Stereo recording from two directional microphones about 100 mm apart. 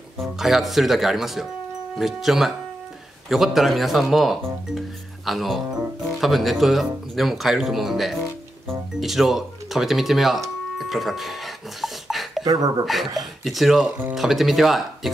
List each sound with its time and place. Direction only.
0.4 s speech: centre (ahead or behind)
10.8 s music: centre (ahead or behind)
12.4 s speech: 40° right (ahead or behind)
12.8 s speech: centre (ahead or behind)